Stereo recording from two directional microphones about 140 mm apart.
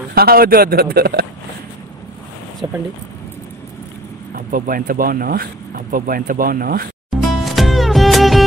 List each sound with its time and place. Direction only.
0.1 s speech: 90° right
4.4 s speech: 85° right
7.2 s music: centre (ahead or behind)